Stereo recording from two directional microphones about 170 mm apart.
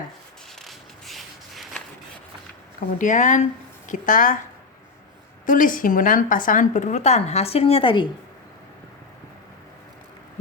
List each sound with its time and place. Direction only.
0.6 s a sound: centre (ahead or behind)
3.0 s speech: 45° left (ahead or behind)
5.5 s speech: 50° left (ahead or behind); by 8.0 s 30° left (ahead or behind)